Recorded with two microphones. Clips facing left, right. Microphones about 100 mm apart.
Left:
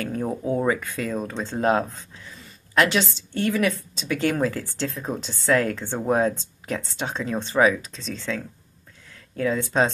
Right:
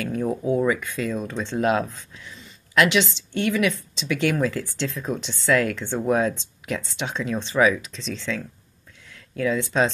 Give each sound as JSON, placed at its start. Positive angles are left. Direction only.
{"t": 0.0, "sound": "speech", "side_deg": 40}
{"t": 9.4, "sound": "speech", "side_deg": 40}